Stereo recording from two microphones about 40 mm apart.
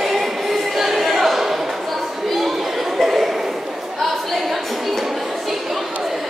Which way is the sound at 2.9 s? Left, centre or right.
Centre.